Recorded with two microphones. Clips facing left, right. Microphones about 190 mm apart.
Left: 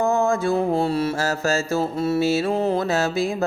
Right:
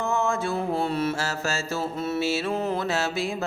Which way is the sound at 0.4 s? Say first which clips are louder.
Left 6 dB; 35° left (ahead or behind).